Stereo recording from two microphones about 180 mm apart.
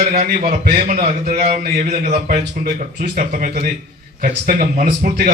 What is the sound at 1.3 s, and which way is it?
A man's voice, 40° right (ahead or behind).